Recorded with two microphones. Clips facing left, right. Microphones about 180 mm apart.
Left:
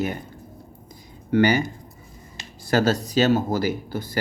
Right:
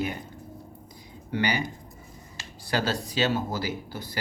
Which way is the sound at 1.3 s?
50° left (ahead or behind).